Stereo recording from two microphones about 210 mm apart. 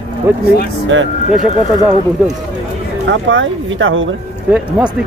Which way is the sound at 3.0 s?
65° right (ahead or behind).